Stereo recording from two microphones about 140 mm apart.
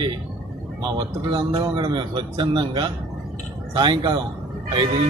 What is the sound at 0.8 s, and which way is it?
A man's voice, 30° right (ahead or behind).